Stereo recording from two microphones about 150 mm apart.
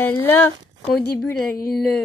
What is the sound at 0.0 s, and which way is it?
Speech, 15° left (ahead or behind).